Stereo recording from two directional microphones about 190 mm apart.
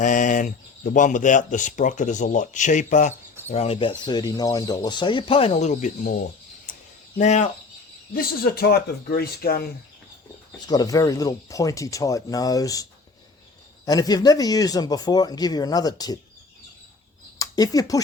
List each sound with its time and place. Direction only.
0.0 s speech: 40° left (ahead or behind)
7.2 s speech: 35° left (ahead or behind)
8.1 s speech: 55° left (ahead or behind)
10.7 s speech: 20° left (ahead or behind)
17.3 s speech: 20° left (ahead or behind)